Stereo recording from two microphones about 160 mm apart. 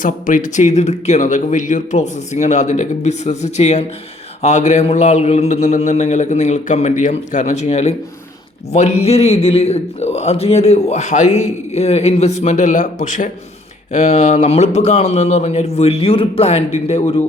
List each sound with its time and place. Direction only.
0.0 s a man's voice: 55° left (ahead or behind)